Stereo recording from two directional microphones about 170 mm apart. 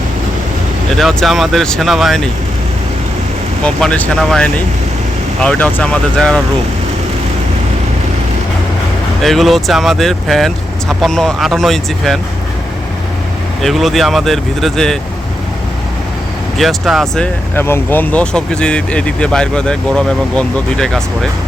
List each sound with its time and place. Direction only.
0.9 s speech: centre (ahead or behind)
3.6 s speech: 5° left (ahead or behind)
9.2 s speech: centre (ahead or behind)
13.6 s speech: centre (ahead or behind)
16.6 s speech: centre (ahead or behind)
17.5 s speech: 15° left (ahead or behind)